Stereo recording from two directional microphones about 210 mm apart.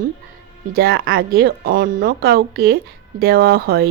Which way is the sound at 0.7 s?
45° right (ahead or behind).